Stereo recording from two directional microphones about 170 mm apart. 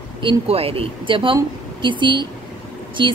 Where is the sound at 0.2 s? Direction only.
30° right (ahead or behind).